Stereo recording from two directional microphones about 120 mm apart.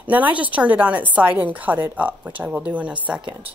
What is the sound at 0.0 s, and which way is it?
A woman's voice, 15° right (ahead or behind).